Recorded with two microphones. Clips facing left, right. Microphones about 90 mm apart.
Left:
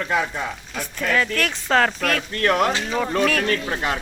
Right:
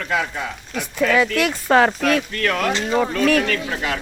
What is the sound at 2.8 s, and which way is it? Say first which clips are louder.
Speech: right 4 dB; 10° right (ahead or behind).